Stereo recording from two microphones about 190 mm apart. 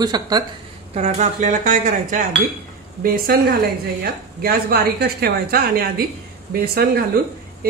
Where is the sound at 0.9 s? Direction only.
40° right (ahead or behind).